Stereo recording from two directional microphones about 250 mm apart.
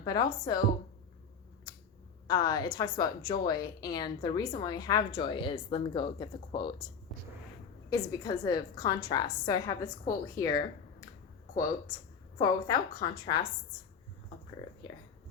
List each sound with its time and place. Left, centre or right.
0.0 s a woman's voice: centre
2.2 s a woman's voice: centre
7.1 s a sound: centre
7.9 s a woman's voice: centre
12.4 s a woman's voice: centre
14.8 s a sound: centre